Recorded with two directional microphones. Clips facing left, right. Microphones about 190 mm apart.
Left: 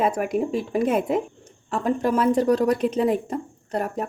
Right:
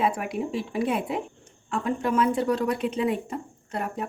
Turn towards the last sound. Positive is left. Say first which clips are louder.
# left 4 dB
turn(degrees=40)  # may be behind; listen again after turning